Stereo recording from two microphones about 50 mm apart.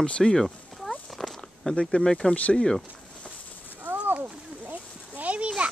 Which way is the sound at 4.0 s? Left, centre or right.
Right.